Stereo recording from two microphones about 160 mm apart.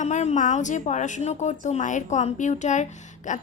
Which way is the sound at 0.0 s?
45° left (ahead or behind).